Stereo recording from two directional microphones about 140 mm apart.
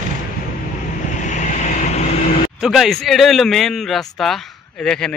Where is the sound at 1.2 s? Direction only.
60° left (ahead or behind).